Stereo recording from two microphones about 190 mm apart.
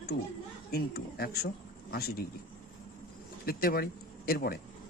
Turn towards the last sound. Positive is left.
turn(degrees=50)  # may be behind; listen again after turning